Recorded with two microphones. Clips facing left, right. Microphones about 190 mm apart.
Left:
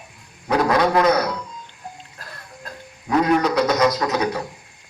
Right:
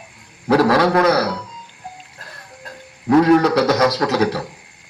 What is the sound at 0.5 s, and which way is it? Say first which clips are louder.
Speech: right 3 dB; 65° right (ahead or behind).